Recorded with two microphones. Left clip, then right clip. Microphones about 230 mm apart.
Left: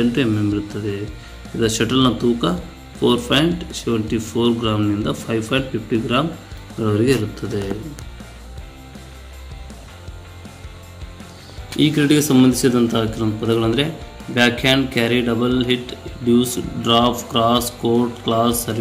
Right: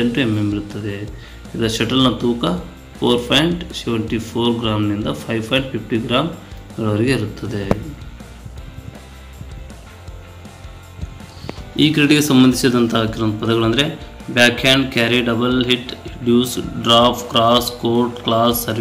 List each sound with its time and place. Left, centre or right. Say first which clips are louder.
0.1 s speech: even; centre
11.7 s a man's voice: right 2 dB; centre